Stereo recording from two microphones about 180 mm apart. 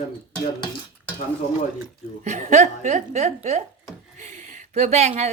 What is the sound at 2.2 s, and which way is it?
Speech, 40° right (ahead or behind).